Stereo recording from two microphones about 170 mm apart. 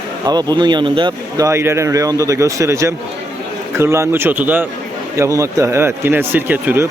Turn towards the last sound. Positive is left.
turn(degrees=-10)  # may be behind; listen again after turning